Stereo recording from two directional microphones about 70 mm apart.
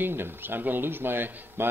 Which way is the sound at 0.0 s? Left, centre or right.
Right.